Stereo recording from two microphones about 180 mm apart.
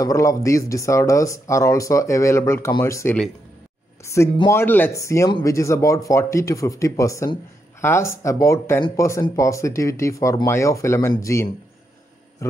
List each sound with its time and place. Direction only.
0.0 s speech: 20° left (ahead or behind)
4.0 s a sound: 15° left (ahead or behind)
4.5 s speech: 10° left (ahead or behind)